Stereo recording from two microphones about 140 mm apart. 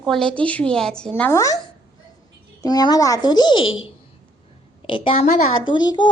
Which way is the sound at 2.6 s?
30° left (ahead or behind).